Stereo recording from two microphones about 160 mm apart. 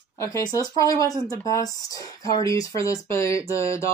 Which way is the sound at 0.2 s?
20° left (ahead or behind).